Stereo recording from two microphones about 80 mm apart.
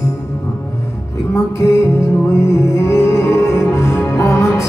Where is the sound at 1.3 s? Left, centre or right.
Left.